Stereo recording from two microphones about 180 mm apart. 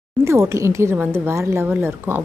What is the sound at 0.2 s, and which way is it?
A woman's voice, 15° right (ahead or behind).